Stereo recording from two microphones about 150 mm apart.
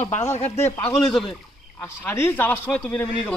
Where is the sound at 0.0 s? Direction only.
45° left (ahead or behind).